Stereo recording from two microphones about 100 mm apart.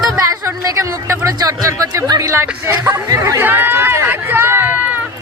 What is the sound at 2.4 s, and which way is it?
Speech, 20° right (ahead or behind).